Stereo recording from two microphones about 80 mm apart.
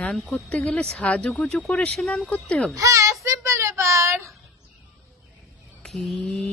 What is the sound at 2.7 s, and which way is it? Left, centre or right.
Speech, right.